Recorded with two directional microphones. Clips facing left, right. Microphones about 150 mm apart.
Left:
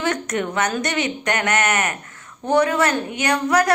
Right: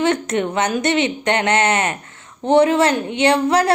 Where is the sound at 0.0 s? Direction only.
25° right (ahead or behind).